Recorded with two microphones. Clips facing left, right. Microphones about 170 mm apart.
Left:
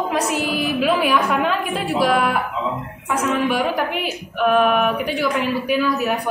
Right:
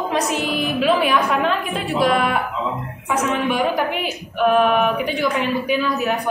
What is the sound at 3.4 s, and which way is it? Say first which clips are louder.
A woman's voice: right 1 dB; centre (ahead or behind).